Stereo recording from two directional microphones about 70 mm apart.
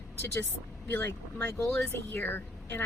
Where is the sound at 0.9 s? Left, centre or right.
Left.